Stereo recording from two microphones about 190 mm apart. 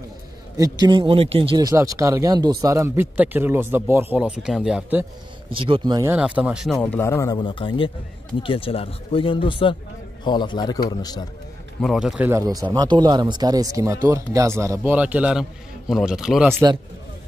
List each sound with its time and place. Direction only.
0.7 s speech: 25° right (ahead or behind); by 5.0 s 5° right (ahead or behind)
5.5 s speech: 25° right (ahead or behind)
6.0 s speech: 5° right (ahead or behind); by 11.2 s 20° left (ahead or behind)
11.8 s a man's voice: centre (ahead or behind)